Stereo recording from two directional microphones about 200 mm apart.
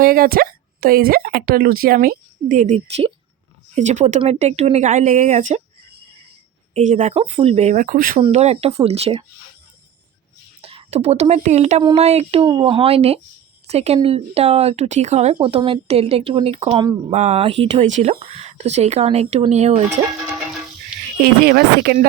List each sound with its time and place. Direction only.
0.0 s speech: 45° right (ahead or behind)
6.7 s speech: 35° right (ahead or behind)
8.2 s speech: 30° right (ahead or behind)
10.6 s speech: 30° right (ahead or behind)
17.1 s speech: 35° right (ahead or behind)
21.2 s speech: 55° right (ahead or behind)